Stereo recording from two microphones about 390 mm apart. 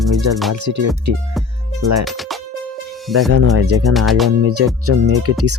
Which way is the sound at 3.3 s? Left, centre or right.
Right.